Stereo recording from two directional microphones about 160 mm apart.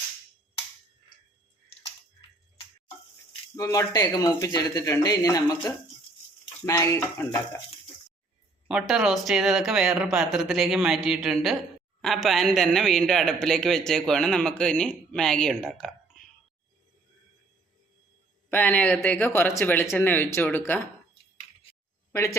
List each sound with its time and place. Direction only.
3.5 s speech: 20° left (ahead or behind)
8.6 s speech: 5° right (ahead or behind)
18.5 s speech: 10° left (ahead or behind)
22.1 s speech: 15° left (ahead or behind)